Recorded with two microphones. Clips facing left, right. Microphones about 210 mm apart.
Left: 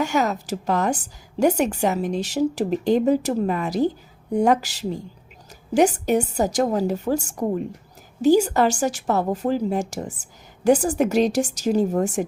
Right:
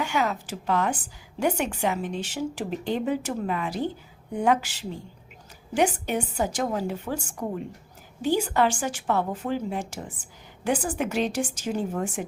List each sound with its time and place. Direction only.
0.0 s a woman's voice: 40° left (ahead or behind)